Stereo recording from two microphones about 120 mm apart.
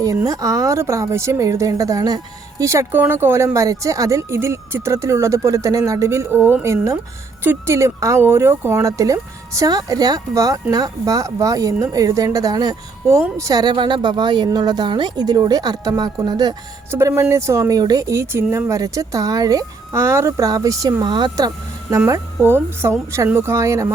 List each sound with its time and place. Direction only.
0.0 s speech: 30° right (ahead or behind)
16.9 s speech: 25° right (ahead or behind)
21.0 s speech: 40° right (ahead or behind)